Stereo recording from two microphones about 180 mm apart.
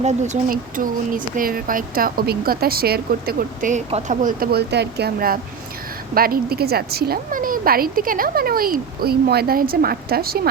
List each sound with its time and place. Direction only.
0.0 s a woman's voice: 40° right (ahead or behind); by 10.5 s 60° right (ahead or behind)